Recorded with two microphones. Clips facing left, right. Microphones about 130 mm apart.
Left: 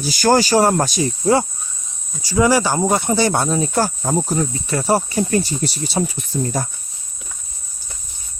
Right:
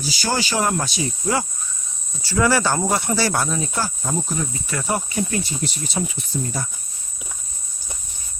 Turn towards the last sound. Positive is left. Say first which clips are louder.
# left 5 dB
turn(degrees=45)  # may be behind; listen again after turning